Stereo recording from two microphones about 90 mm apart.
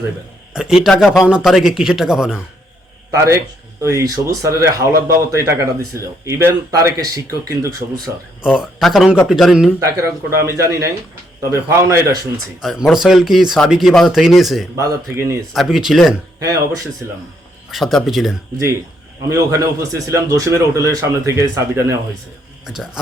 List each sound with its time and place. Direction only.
0.5 s a man's voice: 5° right (ahead or behind)
3.1 s speech: 35° right (ahead or behind)
8.4 s a man's voice: 5° right (ahead or behind)
9.8 s speech: 30° right (ahead or behind)
12.6 s a man's voice: 5° right (ahead or behind)
14.8 s speech: 30° right (ahead or behind)
15.5 s a man's voice: centre (ahead or behind)
16.4 s speech: 35° right (ahead or behind)
17.7 s a man's voice: centre (ahead or behind)
19.3 s speech: 40° right (ahead or behind)
22.6 s speech: 5° right (ahead or behind)